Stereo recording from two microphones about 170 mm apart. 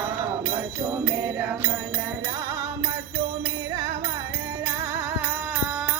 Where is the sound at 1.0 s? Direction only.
20° right (ahead or behind).